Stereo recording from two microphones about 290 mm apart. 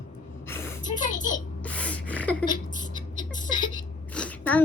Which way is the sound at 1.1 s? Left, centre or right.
Left.